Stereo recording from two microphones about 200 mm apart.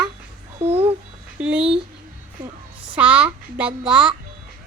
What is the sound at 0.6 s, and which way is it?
Speech, 30° right (ahead or behind).